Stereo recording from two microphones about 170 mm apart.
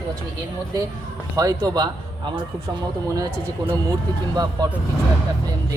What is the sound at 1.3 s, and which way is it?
Speech, 20° right (ahead or behind).